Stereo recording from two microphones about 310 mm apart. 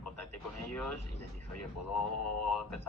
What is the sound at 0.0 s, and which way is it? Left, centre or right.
Radio, left.